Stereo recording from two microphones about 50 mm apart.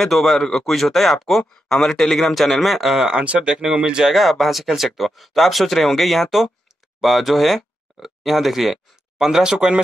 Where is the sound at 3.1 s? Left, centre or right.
Right.